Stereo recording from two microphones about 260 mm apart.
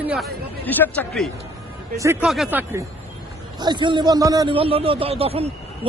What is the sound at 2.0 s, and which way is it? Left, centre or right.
Speech, centre.